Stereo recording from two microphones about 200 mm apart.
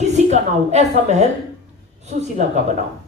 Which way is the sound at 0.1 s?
35° right (ahead or behind).